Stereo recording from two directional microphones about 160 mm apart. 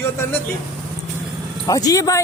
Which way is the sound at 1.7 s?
20° left (ahead or behind).